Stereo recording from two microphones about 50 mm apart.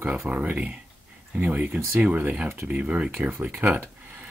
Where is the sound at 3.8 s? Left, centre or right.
Right.